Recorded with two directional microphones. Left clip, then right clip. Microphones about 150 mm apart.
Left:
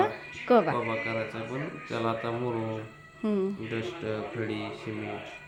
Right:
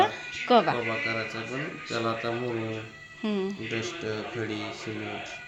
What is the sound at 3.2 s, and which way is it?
Speech, 25° left (ahead or behind).